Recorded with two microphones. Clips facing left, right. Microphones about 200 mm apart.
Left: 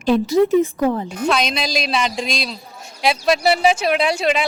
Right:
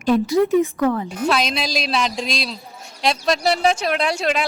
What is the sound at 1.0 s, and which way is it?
Speech, centre (ahead or behind).